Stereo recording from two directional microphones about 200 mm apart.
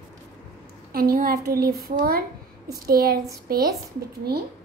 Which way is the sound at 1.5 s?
50° right (ahead or behind).